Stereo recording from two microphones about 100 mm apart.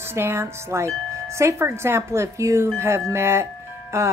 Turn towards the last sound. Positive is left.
turn(degrees=-30)  # may be behind; listen again after turning